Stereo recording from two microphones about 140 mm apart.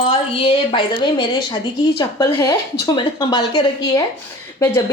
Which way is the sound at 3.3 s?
35° left (ahead or behind).